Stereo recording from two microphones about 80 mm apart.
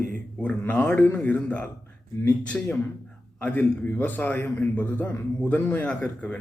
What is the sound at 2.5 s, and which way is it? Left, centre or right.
Speech, centre.